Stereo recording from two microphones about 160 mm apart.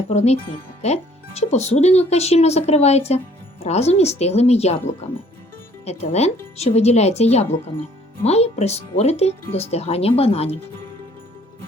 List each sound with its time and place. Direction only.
0.1 s speech: 40° left (ahead or behind)